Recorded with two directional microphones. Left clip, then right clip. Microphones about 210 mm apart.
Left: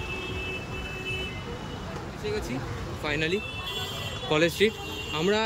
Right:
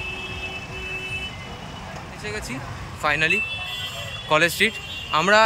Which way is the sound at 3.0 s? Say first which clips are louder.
Right 8 dB; 5° left (ahead or behind).